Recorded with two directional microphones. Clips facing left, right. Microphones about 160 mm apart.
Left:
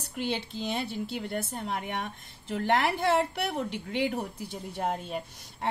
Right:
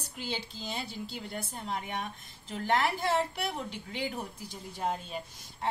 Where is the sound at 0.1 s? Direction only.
60° left (ahead or behind).